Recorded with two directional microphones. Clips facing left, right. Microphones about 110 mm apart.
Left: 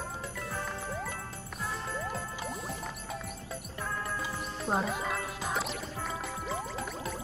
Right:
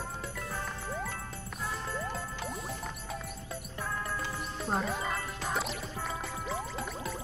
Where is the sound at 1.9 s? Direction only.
Centre (ahead or behind).